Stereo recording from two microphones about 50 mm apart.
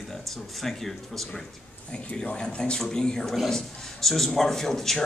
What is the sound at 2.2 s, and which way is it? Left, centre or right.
A man's voice, centre.